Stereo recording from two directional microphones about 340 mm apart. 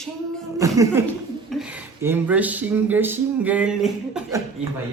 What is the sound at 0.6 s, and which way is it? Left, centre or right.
Speech, centre.